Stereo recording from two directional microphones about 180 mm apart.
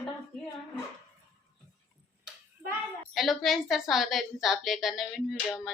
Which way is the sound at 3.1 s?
Centre (ahead or behind).